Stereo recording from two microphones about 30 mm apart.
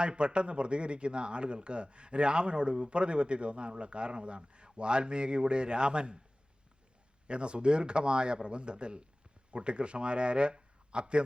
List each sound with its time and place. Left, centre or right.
0.0 s a man's voice: right
7.3 s a man's voice: right